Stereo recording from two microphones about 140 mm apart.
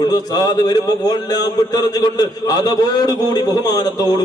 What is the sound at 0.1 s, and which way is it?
A man's voice, 25° left (ahead or behind).